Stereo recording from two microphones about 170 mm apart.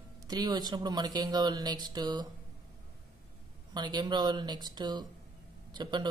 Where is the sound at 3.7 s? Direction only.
25° right (ahead or behind).